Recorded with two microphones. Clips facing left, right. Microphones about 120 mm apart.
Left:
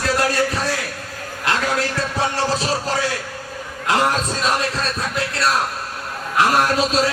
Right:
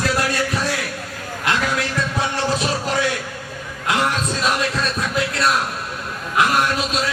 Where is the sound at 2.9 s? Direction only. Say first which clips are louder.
Right 1 dB; 30° left (ahead or behind).